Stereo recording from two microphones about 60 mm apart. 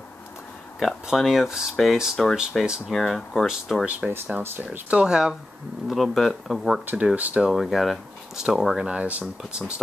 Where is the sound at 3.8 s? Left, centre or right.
Right.